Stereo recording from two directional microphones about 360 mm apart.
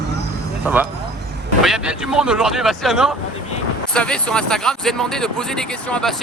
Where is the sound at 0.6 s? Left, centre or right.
Centre.